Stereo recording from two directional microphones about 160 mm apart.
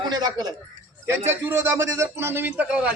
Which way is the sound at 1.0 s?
15° right (ahead or behind).